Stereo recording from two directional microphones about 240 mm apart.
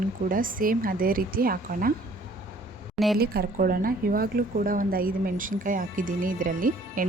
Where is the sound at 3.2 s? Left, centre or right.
Right.